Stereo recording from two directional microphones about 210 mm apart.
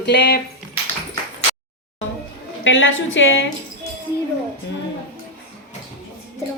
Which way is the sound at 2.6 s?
65° left (ahead or behind).